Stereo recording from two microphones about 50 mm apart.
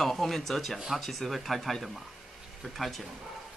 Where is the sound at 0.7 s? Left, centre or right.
Centre.